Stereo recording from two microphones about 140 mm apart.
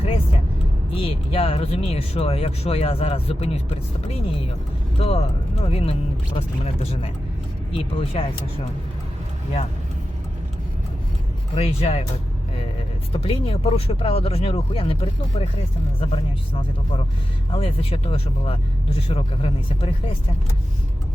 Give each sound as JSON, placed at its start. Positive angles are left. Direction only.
{"t": 0.9, "sound": "speech", "side_deg": 40}
{"t": 4.9, "sound": "speech", "side_deg": 45}
{"t": 11.5, "sound": "speech", "side_deg": 45}
{"t": 13.1, "sound": "speech", "side_deg": 45}